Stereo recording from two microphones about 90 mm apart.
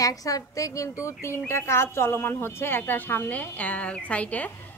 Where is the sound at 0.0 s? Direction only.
40° left (ahead or behind).